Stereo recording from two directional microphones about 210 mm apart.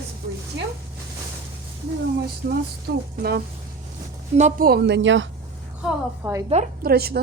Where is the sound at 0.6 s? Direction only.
55° right (ahead or behind).